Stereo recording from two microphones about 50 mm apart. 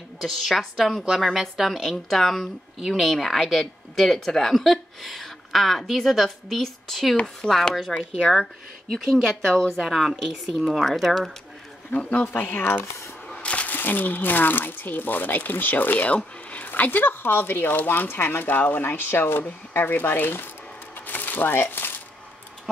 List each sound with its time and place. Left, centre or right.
0.2 s a woman's voice: centre
9.8 s a woman's voice: centre
11.9 s speech: left
13.3 s a sound: left
13.7 s speech: left
19.4 s speech: left
21.1 s a sound: left